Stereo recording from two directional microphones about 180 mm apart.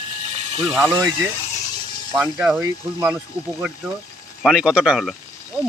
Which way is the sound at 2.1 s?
5° right (ahead or behind).